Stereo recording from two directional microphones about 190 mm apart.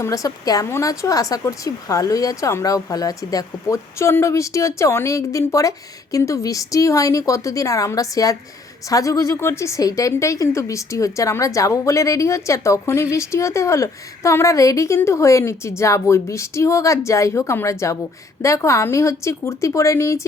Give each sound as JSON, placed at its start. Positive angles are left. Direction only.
{"t": 0.0, "sound": "a woman's voice", "side_deg": 20}